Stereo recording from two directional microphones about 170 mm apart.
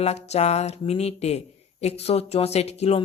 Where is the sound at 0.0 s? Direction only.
40° left (ahead or behind).